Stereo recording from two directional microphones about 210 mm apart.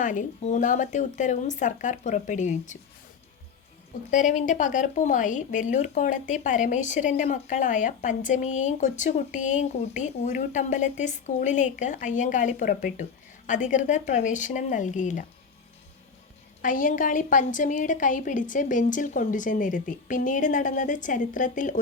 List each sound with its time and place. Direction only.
0.0 s speech: 35° left (ahead or behind)
4.1 s speech: 35° left (ahead or behind)
16.6 s speech: 40° left (ahead or behind)